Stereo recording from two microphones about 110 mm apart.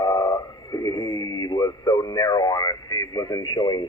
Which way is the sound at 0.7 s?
35° left (ahead or behind).